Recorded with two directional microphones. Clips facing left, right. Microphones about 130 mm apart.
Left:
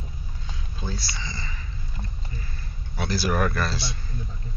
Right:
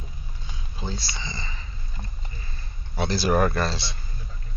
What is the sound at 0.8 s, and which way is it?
Speech, 25° right (ahead or behind).